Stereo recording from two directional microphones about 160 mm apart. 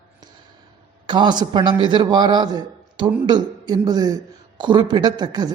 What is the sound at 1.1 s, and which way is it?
A man's voice, 30° right (ahead or behind).